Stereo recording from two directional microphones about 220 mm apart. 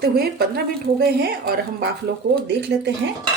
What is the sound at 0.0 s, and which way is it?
Speech, 45° right (ahead or behind).